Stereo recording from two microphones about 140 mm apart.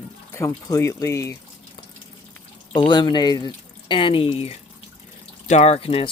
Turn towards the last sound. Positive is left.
turn(degrees=45)  # may be behind; listen again after turning